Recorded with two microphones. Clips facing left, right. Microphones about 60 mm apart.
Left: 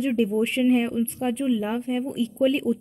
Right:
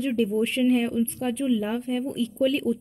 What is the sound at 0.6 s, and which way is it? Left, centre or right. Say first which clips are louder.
A woman's voice: left 1 dB; centre.